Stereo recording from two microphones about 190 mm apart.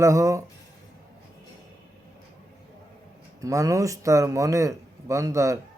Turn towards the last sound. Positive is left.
turn(degrees=-15)  # may be behind; listen again after turning